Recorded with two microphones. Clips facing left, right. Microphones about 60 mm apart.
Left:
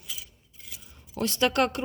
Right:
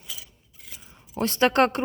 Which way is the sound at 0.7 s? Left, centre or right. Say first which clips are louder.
Right 3 dB; right.